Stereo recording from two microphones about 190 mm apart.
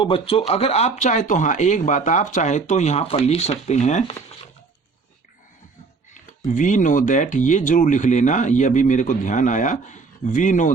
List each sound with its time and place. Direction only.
0.0 s speech: 30° left (ahead or behind)
6.1 s speech: 40° left (ahead or behind)